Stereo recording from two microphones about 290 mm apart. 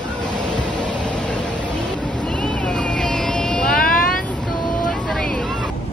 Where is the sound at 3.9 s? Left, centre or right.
Left.